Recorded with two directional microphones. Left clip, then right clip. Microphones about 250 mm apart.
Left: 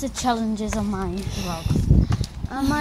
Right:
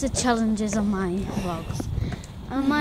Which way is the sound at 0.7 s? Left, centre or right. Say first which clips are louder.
Right 1 dB; centre.